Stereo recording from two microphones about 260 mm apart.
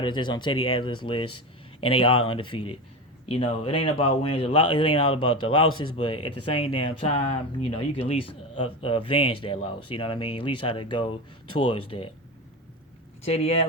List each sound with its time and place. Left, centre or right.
0.0 s speech: centre
13.2 s speech: left